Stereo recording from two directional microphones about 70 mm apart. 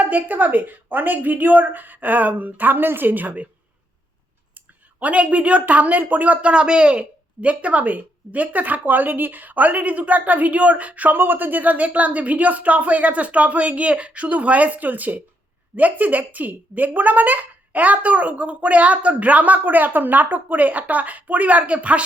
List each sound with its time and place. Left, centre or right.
0.0 s a woman's voice: right
4.9 s a woman's voice: centre